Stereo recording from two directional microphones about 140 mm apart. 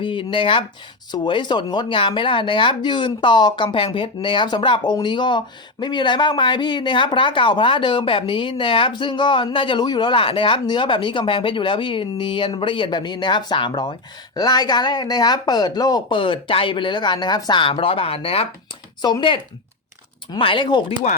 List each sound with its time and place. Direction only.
0.0 s speech: 35° left (ahead or behind)